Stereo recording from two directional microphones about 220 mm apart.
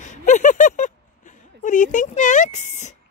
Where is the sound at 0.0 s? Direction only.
35° left (ahead or behind).